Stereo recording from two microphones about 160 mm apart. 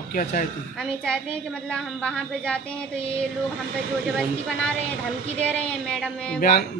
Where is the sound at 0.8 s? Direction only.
5° left (ahead or behind).